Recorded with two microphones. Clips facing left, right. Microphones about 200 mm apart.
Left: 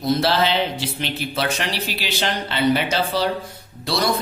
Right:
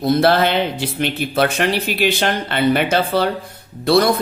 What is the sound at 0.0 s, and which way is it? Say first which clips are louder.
Speech: right 5 dB; 55° right (ahead or behind).